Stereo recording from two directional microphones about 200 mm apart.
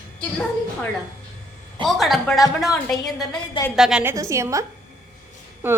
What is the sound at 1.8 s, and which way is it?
A woman's voice, centre (ahead or behind).